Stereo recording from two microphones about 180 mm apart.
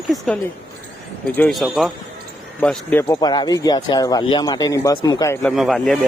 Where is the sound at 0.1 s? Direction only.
20° right (ahead or behind).